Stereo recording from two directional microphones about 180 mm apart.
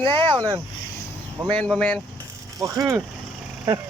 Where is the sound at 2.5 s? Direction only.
20° right (ahead or behind).